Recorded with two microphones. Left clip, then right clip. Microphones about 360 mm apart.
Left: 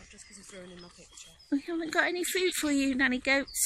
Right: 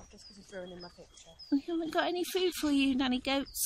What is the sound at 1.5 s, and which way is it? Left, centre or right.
Speech, centre.